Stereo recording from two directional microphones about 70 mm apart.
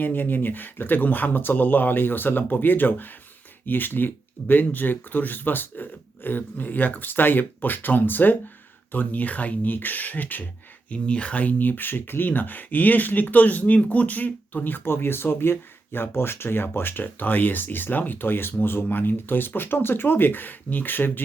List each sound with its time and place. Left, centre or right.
0.0 s speech: left